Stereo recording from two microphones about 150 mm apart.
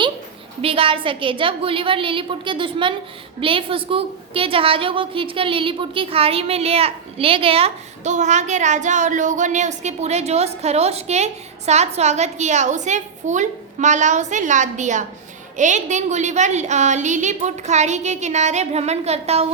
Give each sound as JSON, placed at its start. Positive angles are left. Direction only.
{"t": 0.6, "sound": "a woman's voice", "side_deg": -35}